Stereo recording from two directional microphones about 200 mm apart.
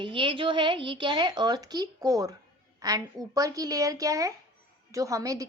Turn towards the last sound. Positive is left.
turn(degrees=-15)  # may be behind; listen again after turning